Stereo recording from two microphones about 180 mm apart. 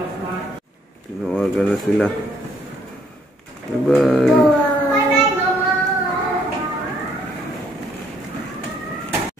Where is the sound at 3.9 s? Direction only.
Centre (ahead or behind).